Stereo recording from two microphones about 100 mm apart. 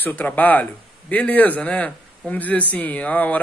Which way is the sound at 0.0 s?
15° left (ahead or behind).